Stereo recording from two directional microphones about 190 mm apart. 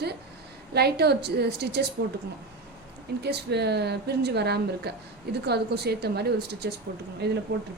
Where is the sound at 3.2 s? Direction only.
60° right (ahead or behind).